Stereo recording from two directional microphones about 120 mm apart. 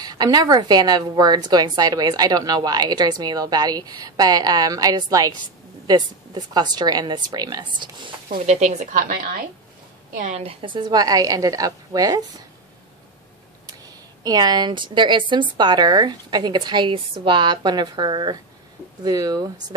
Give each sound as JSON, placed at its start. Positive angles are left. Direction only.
{"t": 0.0, "sound": "a woman's voice", "side_deg": -35}
{"t": 8.5, "sound": "a woman's voice", "side_deg": -75}
{"t": 10.1, "sound": "a woman's voice", "side_deg": -80}
{"t": 13.8, "sound": "a woman's voice", "side_deg": -35}